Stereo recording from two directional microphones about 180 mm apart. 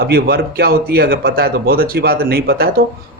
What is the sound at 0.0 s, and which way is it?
Speech, 60° right (ahead or behind).